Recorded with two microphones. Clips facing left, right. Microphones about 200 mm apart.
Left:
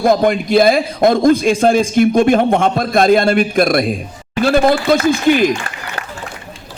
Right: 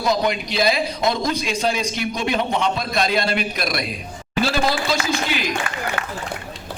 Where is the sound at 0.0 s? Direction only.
50° left (ahead or behind).